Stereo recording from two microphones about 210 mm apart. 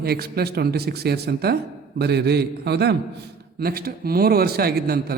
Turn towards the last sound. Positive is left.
turn(degrees=-50)  # may be behind; listen again after turning